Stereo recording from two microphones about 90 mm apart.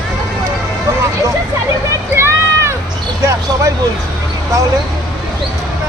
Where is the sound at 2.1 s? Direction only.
30° right (ahead or behind).